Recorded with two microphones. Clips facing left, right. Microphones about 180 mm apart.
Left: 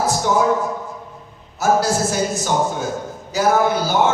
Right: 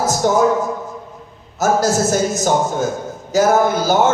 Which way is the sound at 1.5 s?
45° right (ahead or behind).